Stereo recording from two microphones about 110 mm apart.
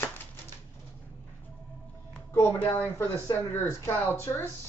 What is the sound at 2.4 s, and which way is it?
Speech, 15° left (ahead or behind).